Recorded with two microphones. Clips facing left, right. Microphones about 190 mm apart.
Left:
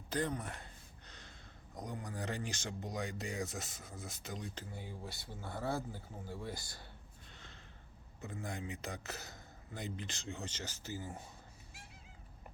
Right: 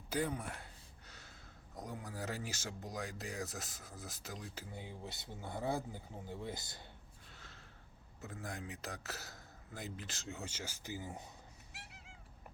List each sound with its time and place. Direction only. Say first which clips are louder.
0.1 s a sound: even; 10° right (ahead or behind)
1.7 s a man's voice: left 2 dB; 5° right (ahead or behind)
4.7 s speech: left 1 dB; 20° right (ahead or behind)
7.3 s snort: left 1 dB; 5° right (ahead or behind)
8.2 s a man's voice: left 3 dB; centre (ahead or behind); by 11.3 s 15° right (ahead or behind)
11.7 s cat: right 1 dB; 70° right (ahead or behind)